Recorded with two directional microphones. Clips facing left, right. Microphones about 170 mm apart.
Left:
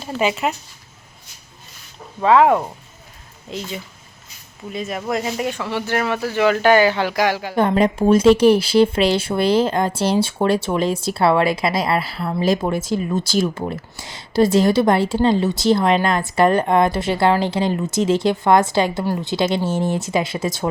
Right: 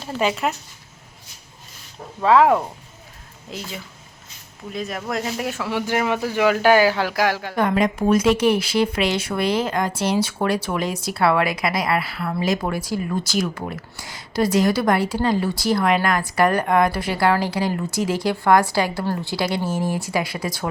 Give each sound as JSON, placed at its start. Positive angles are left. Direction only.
{"t": 0.0, "sound": "speech", "side_deg": 5}
{"t": 2.2, "sound": "speech", "side_deg": 0}
{"t": 4.7, "sound": "speech", "side_deg": 0}
{"t": 7.5, "sound": "speech", "side_deg": 30}